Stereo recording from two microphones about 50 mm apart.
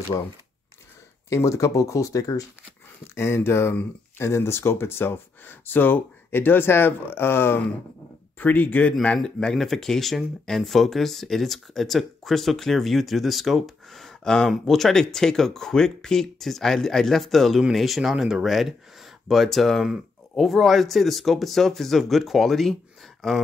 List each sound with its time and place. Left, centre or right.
1.3 s speech: left
3.2 s speech: left
8.4 s speech: left
9.2 s speech: centre